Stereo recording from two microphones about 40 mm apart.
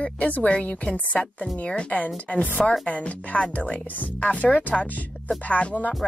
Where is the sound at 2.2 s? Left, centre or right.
Left.